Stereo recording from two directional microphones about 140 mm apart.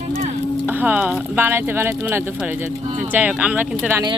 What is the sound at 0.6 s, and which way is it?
Speech, 15° right (ahead or behind).